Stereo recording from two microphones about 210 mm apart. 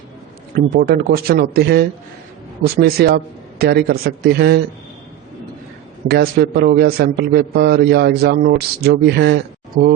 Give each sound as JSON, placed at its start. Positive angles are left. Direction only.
{"t": 0.5, "sound": "a man's voice", "side_deg": -45}
{"t": 6.1, "sound": "a man's voice", "side_deg": -50}